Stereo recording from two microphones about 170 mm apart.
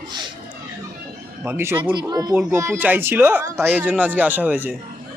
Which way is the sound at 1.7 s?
25° right (ahead or behind).